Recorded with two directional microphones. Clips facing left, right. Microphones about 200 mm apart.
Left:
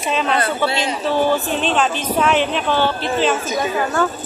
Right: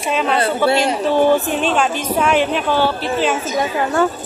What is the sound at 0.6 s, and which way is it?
Speech, 55° right (ahead or behind).